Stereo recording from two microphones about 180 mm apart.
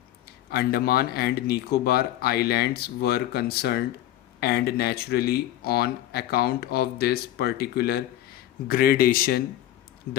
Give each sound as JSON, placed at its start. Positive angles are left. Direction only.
{"t": 0.5, "sound": "speech", "side_deg": 60}